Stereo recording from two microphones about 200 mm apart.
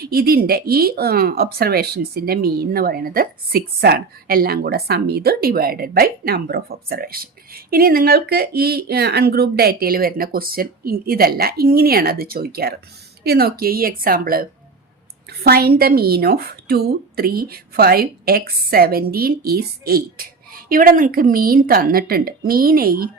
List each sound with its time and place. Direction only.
0.0 s speech: 50° right (ahead or behind)